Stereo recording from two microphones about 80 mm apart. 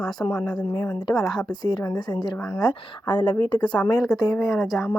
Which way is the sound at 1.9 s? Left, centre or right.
Left.